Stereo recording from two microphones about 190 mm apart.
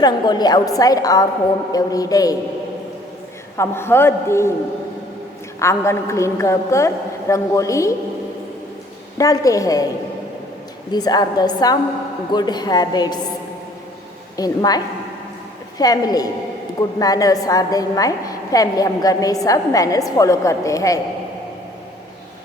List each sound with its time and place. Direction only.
0.0 s a woman's voice: 20° left (ahead or behind)
3.6 s a woman's voice: 10° left (ahead or behind)
5.5 s a woman's voice: 15° left (ahead or behind)
9.1 s a woman's voice: 15° left (ahead or behind)
10.9 s a woman's voice: 20° left (ahead or behind)
14.3 s a woman's voice: 20° left (ahead or behind)
15.8 s a woman's voice: 20° left (ahead or behind)